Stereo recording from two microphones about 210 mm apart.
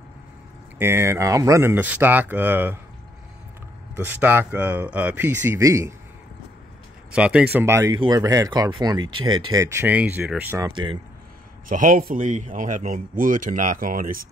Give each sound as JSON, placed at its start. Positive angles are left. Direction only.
{"t": 0.7, "sound": "speech", "side_deg": -10}
{"t": 3.9, "sound": "speech", "side_deg": -10}
{"t": 7.1, "sound": "speech", "side_deg": -5}
{"t": 10.7, "sound": "speech", "side_deg": -20}
{"t": 11.7, "sound": "speech", "side_deg": -40}